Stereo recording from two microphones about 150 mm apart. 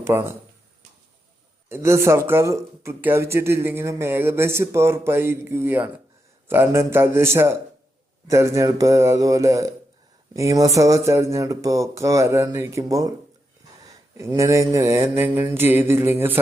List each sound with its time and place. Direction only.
0.0 s speech: 15° right (ahead or behind)
1.7 s speech: 20° right (ahead or behind)